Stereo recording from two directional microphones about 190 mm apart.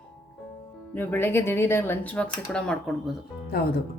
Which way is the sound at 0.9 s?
10° left (ahead or behind).